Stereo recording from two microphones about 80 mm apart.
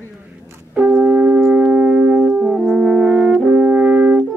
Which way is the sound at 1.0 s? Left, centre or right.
Centre.